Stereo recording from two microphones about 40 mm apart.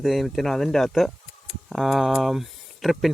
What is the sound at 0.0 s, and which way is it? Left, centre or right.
Speech, centre.